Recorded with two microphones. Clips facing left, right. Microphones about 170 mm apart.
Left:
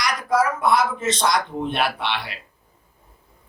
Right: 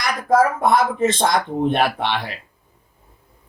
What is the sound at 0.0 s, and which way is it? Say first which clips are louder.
Speech: right 4 dB; 50° right (ahead or behind).